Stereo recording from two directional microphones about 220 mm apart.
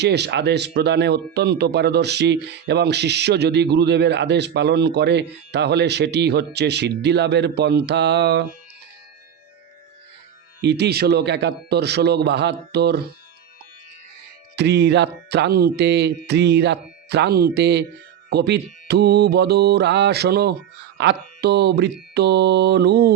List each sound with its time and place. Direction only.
0.0 s speech: 50° right (ahead or behind)
10.6 s speech: 50° right (ahead or behind)
14.5 s speech: 50° right (ahead or behind)